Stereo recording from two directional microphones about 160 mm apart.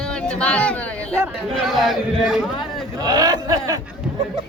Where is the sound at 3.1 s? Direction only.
25° right (ahead or behind).